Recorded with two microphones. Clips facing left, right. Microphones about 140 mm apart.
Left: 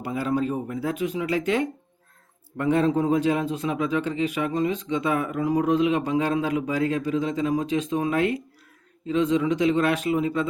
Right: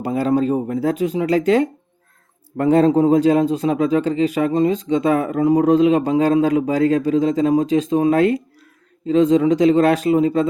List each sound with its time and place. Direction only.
0.0 s a man's voice: 35° right (ahead or behind)